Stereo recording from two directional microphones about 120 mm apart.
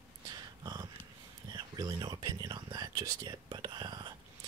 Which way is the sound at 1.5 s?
35° right (ahead or behind).